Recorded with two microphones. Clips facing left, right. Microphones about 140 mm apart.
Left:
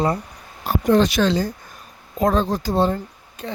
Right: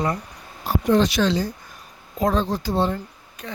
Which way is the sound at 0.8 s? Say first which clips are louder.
Left 2 dB; 50° left (ahead or behind).